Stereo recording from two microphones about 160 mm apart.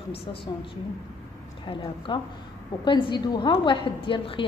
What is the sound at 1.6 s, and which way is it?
A woman's voice, 30° left (ahead or behind).